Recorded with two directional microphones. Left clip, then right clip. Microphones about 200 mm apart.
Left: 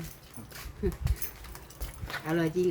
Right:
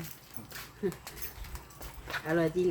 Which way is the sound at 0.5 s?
Centre (ahead or behind).